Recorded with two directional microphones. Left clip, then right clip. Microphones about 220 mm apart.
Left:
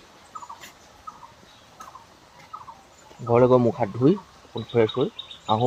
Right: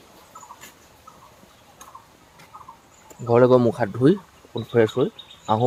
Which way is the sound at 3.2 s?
15° right (ahead or behind).